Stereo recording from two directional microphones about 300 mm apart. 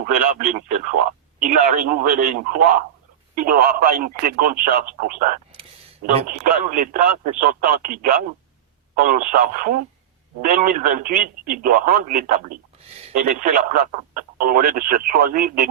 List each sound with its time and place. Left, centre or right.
1.4 s speech: right